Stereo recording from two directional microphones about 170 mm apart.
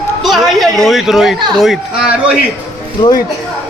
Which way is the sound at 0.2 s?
Centre (ahead or behind).